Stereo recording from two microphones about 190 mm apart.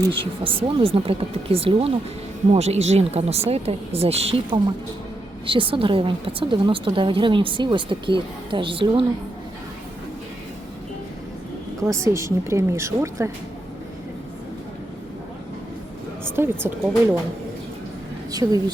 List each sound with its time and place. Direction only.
0.1 s a woman's voice: 30° right (ahead or behind)
11.8 s a woman's voice: 15° right (ahead or behind)
16.3 s a woman's voice: 10° right (ahead or behind)
18.3 s a woman's voice: 20° right (ahead or behind)